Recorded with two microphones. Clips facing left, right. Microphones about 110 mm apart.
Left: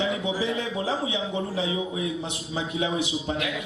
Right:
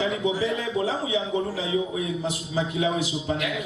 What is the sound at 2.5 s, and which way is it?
Speech, 30° left (ahead or behind).